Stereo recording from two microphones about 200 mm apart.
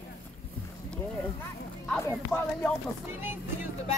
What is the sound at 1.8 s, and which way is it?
Speech, 5° left (ahead or behind).